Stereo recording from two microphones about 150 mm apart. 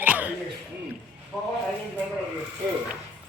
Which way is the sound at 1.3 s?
Centre (ahead or behind).